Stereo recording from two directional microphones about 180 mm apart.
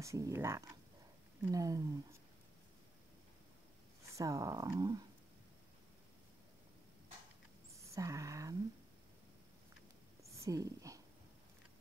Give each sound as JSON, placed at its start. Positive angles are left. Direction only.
{"t": 0.0, "sound": "speech", "side_deg": -15}
{"t": 4.1, "sound": "speech", "side_deg": -15}
{"t": 7.9, "sound": "a sound", "side_deg": -15}
{"t": 10.4, "sound": "speech", "side_deg": -20}